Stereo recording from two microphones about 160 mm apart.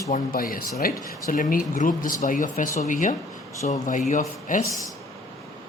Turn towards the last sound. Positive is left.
turn(degrees=50)  # may be behind; listen again after turning